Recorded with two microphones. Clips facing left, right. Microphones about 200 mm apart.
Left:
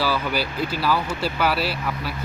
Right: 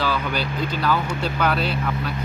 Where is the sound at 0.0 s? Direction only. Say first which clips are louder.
Left 1 dB; 5° left (ahead or behind).